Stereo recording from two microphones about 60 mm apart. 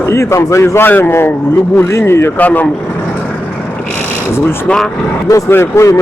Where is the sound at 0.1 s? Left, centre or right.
Left.